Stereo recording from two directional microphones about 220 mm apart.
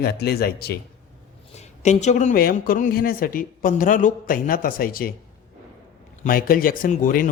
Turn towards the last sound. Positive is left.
turn(degrees=35)  # may be behind; listen again after turning